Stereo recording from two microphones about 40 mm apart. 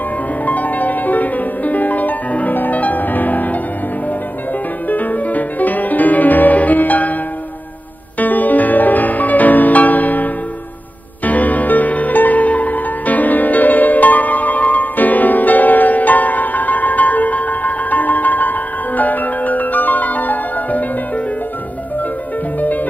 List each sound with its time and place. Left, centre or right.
0.5 s music: left
4.8 s music: left
8.2 s music: left
22.6 s music: left